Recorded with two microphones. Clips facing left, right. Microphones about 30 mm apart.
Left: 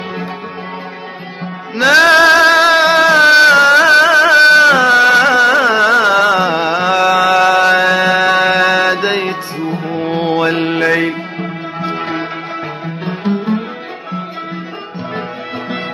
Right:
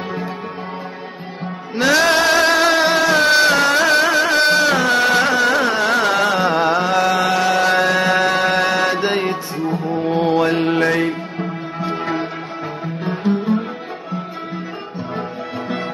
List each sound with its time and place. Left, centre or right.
1.8 s music: left
7.6 s music: left
9.6 s music: left